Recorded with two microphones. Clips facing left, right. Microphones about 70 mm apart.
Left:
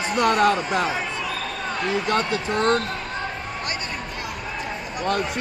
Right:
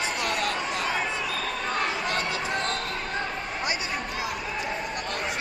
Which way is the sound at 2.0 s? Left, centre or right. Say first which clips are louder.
Left 5 dB; left.